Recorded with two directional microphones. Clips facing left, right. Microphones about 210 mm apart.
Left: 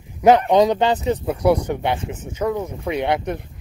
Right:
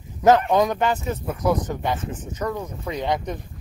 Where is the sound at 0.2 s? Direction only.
15° left (ahead or behind).